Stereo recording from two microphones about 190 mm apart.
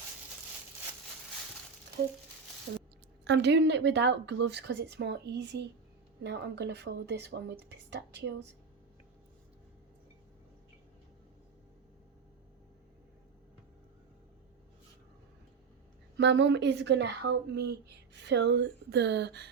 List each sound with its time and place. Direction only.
2.0 s speech: 55° right (ahead or behind)
2.7 s speech: 65° right (ahead or behind)
16.1 s speech: 70° right (ahead or behind)